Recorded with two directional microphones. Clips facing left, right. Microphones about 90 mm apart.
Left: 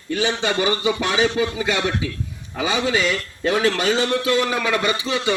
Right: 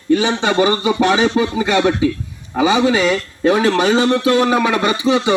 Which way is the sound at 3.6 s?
30° right (ahead or behind).